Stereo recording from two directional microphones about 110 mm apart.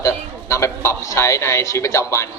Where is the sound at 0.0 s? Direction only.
25° left (ahead or behind).